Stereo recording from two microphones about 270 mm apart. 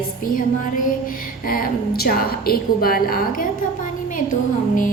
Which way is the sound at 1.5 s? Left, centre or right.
Left.